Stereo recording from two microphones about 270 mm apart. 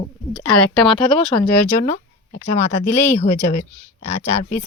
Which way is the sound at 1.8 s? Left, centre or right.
Left.